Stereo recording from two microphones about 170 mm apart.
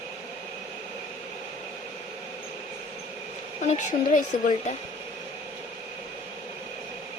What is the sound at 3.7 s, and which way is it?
Speech, 45° left (ahead or behind).